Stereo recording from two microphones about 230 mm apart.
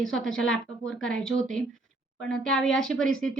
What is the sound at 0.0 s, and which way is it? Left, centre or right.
A woman's voice, centre.